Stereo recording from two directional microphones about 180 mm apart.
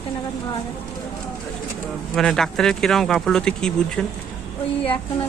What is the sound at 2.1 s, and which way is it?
Speech, centre (ahead or behind).